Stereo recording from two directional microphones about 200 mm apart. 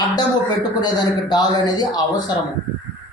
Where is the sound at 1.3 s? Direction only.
20° left (ahead or behind).